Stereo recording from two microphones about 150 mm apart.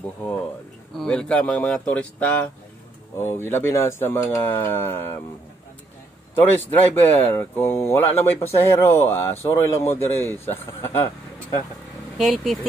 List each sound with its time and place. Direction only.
0.9 s a man's voice: 5° left (ahead or behind)
6.3 s a man's voice: 10° left (ahead or behind)
12.2 s speech: centre (ahead or behind)